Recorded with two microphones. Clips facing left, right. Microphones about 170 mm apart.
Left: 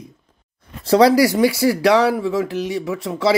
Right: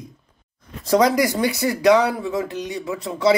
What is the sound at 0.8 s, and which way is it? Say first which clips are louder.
Speech: left 4 dB; 30° left (ahead or behind).